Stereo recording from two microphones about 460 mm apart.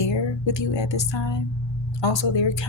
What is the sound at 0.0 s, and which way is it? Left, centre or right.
Speech, left.